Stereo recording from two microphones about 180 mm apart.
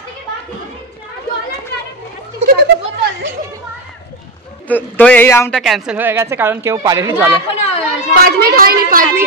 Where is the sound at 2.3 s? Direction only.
40° right (ahead or behind).